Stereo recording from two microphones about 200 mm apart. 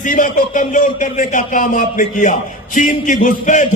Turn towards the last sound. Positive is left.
turn(degrees=40)  # may be behind; listen again after turning